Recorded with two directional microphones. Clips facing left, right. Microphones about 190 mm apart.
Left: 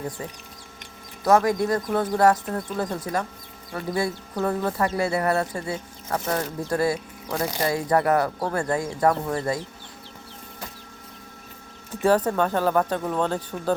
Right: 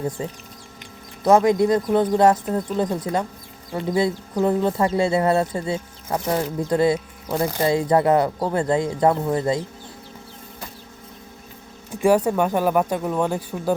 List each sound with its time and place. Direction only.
0.2 s speech: 25° right (ahead or behind)
11.9 s speech: 10° right (ahead or behind)